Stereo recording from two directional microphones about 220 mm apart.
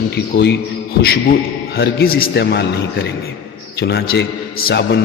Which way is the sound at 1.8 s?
45° left (ahead or behind).